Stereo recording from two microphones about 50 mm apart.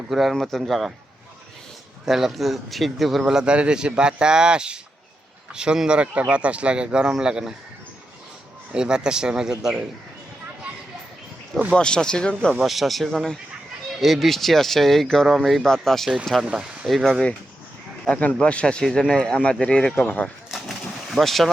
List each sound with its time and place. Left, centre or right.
0.1 s speech: centre
2.0 s speech: centre
3.3 s speech: right
8.7 s speech: centre
11.7 s speech: centre
12.6 s speech: centre
16.6 s speech: right
16.8 s speech: centre
18.0 s speech: left
20.5 s a sound: centre
21.1 s speech: centre